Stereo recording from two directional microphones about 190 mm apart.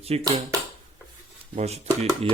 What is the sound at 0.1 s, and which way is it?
Speech, 30° right (ahead or behind).